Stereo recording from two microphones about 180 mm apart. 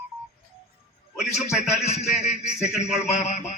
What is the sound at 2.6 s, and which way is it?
Speech, 5° right (ahead or behind).